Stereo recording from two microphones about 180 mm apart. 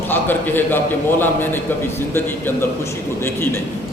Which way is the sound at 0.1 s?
10° left (ahead or behind).